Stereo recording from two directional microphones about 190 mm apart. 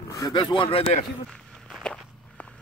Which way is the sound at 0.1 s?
20° left (ahead or behind).